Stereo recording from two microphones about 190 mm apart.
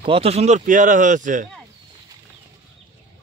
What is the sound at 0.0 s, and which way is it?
Speech, 30° right (ahead or behind).